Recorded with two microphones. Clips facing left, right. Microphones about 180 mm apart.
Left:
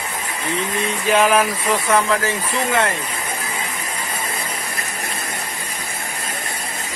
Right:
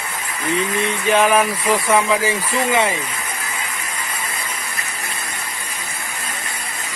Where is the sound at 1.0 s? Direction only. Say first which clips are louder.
Even; centre (ahead or behind).